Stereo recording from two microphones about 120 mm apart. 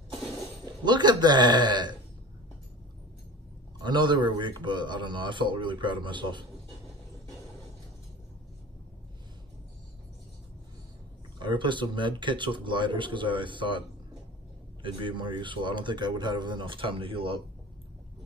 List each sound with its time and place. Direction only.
0.8 s a man's voice: 35° right (ahead or behind)
3.8 s a man's voice: 40° right (ahead or behind)
11.3 s a man's voice: 40° right (ahead or behind)